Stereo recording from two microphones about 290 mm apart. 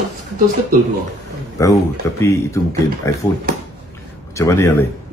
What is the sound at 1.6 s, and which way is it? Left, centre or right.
A man's voice, centre.